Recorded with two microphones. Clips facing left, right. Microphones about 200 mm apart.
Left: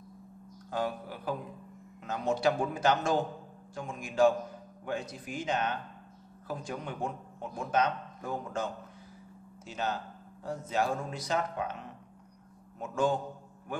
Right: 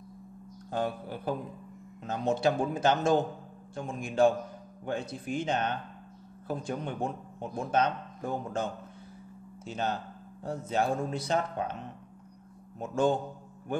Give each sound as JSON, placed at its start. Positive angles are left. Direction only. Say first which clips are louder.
{"t": 0.7, "sound": "speech", "louder": "right 2 dB", "side_deg": -25}
{"t": 9.7, "sound": "speech", "louder": "right 2 dB", "side_deg": -30}
{"t": 12.7, "sound": "speech", "louder": "right 3 dB", "side_deg": -30}